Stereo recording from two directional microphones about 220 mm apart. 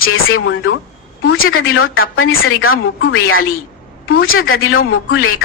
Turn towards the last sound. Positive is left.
turn(degrees=70)  # may be behind; listen again after turning